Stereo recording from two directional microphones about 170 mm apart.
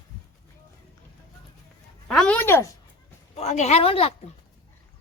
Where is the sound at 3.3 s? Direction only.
40° left (ahead or behind).